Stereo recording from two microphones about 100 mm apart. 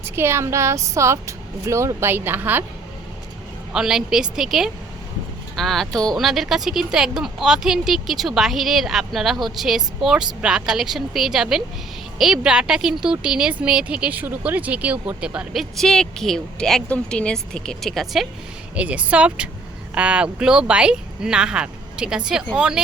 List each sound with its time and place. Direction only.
0.0 s speech: 25° right (ahead or behind)
3.7 s speech: 5° right (ahead or behind)
15.7 s speech: 5° left (ahead or behind)
18.8 s speech: 15° right (ahead or behind)